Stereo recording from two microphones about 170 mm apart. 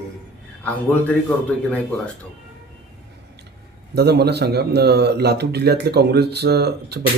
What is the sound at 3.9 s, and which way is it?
A man's voice, 75° right (ahead or behind).